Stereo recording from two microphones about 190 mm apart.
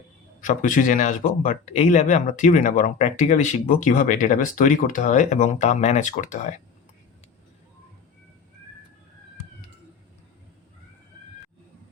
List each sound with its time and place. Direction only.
0.4 s speech: 45° left (ahead or behind)